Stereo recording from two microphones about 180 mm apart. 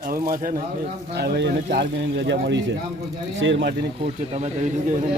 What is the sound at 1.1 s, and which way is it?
A man's voice, 65° right (ahead or behind).